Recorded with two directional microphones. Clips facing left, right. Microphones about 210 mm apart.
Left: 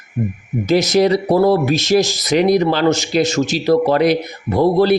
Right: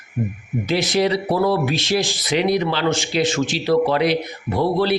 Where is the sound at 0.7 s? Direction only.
45° left (ahead or behind).